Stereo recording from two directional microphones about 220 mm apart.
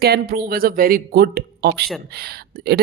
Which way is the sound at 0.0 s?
45° right (ahead or behind).